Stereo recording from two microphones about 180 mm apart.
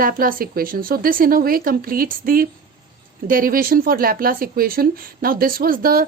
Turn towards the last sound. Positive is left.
turn(degrees=-55)  # may be behind; listen again after turning